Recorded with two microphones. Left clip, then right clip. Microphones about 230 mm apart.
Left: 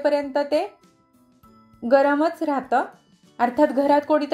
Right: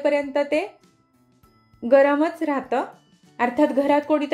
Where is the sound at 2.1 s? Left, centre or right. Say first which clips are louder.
Left 1 dB; left.